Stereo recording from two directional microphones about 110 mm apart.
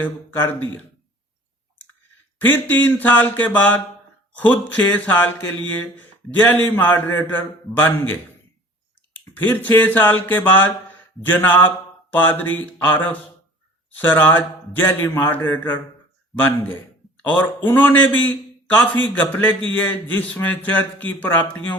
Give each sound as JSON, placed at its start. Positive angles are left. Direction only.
{"t": 0.0, "sound": "a man's voice", "side_deg": 20}
{"t": 2.4, "sound": "a man's voice", "side_deg": 15}
{"t": 4.9, "sound": "a man's voice", "side_deg": 15}
{"t": 6.3, "sound": "a man's voice", "side_deg": 15}
{"t": 9.4, "sound": "a man's voice", "side_deg": 15}
{"t": 17.2, "sound": "a man's voice", "side_deg": 15}